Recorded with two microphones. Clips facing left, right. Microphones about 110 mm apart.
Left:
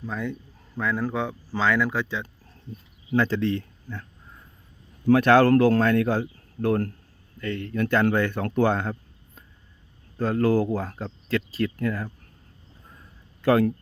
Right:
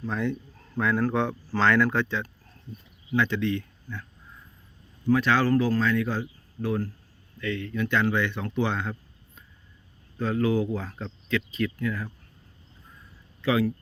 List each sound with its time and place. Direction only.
0.0 s a man's voice: 5° left (ahead or behind)
3.1 s speech: 35° left (ahead or behind)
5.0 s speech: 60° left (ahead or behind)
7.3 s speech: 40° left (ahead or behind)
13.4 s speech: 50° left (ahead or behind)